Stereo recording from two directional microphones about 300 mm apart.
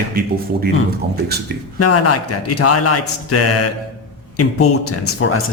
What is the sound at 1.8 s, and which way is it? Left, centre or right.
Speech, left.